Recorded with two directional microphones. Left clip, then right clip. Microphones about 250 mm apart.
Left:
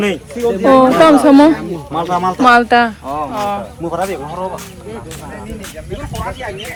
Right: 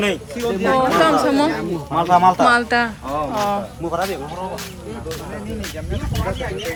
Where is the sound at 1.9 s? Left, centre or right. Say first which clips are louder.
Right 3 dB; centre.